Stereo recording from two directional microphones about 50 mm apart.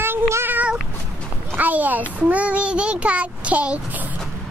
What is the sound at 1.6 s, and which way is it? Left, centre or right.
A child's voice, right.